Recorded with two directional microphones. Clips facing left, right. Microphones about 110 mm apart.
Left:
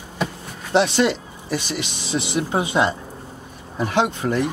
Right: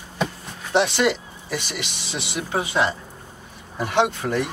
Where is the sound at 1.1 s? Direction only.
20° left (ahead or behind).